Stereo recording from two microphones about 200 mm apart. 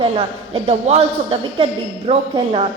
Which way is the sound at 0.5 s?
30° right (ahead or behind).